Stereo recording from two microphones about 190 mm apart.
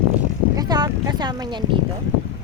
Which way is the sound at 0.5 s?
20° right (ahead or behind).